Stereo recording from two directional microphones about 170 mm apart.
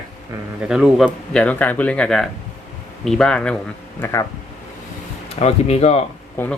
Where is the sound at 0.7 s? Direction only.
5° right (ahead or behind).